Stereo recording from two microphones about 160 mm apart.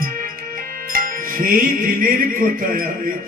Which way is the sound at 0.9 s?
60° right (ahead or behind).